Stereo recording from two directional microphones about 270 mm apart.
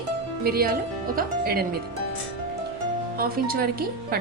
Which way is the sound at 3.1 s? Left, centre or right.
Right.